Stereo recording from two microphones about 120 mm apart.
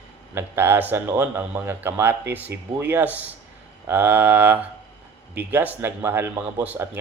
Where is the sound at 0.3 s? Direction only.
20° right (ahead or behind).